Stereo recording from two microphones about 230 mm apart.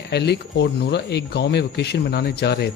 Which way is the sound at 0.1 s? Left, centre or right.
Left.